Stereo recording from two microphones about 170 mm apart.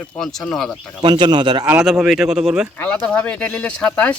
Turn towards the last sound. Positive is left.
turn(degrees=5)  # may be behind; listen again after turning